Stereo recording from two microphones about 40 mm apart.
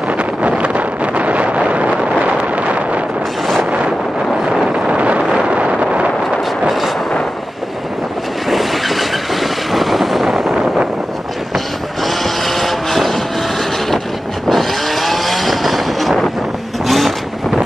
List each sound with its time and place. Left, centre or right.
0.2 s wind noise: right
4.7 s wind noise: right
8.5 s vehicle: centre
11.5 s vehicle: centre
14.5 s vehicle: centre